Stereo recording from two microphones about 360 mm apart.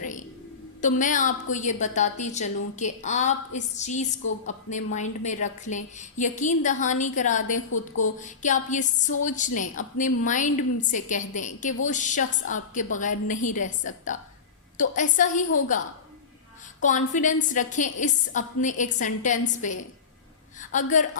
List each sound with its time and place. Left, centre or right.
0.0 s a sound: left
0.8 s a woman's voice: left
16.8 s a woman's voice: left